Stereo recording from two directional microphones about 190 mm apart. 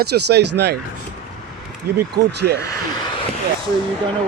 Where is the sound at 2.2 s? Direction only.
60° right (ahead or behind).